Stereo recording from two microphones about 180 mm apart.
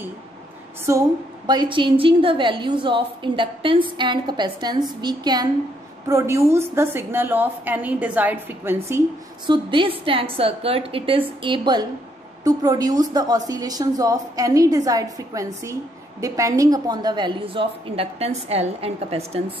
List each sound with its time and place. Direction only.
0.9 s a woman's voice: 15° right (ahead or behind)
9.5 s a woman's voice: 30° right (ahead or behind)